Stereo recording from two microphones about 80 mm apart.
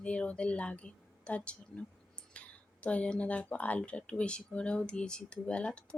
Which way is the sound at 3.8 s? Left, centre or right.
Centre.